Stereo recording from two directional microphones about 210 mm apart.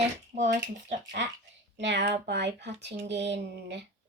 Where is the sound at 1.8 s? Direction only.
55° right (ahead or behind).